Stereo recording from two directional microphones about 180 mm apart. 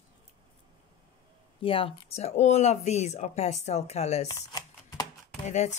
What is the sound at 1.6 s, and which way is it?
Speech, 30° left (ahead or behind).